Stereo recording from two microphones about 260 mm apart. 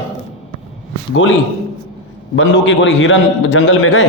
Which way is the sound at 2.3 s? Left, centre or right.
Left.